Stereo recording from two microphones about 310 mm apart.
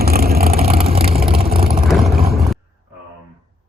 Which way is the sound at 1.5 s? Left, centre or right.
Right.